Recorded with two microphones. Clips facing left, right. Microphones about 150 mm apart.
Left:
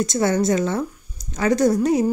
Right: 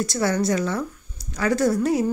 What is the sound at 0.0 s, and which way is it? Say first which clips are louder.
Speech: left 3 dB; 20° left (ahead or behind).